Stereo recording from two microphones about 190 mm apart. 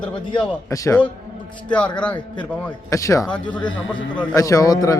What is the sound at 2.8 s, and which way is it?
A man's voice, 15° left (ahead or behind).